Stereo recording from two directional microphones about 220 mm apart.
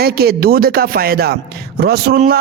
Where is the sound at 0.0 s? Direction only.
45° right (ahead or behind).